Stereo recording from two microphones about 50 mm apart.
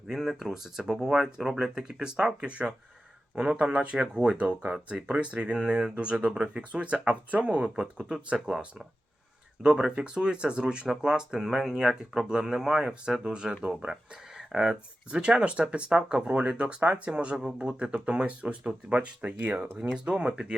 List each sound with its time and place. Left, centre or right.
0.1 s speech: centre
2.5 s speech: right
9.6 s speech: centre